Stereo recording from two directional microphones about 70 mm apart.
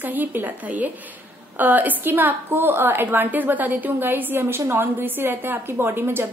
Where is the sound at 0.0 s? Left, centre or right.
Right.